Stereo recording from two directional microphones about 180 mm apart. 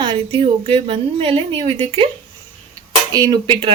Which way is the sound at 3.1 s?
20° right (ahead or behind).